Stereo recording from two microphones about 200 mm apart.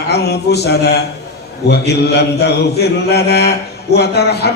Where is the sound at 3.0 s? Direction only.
55° left (ahead or behind).